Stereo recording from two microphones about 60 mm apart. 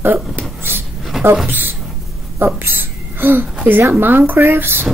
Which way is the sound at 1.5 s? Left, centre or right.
Right.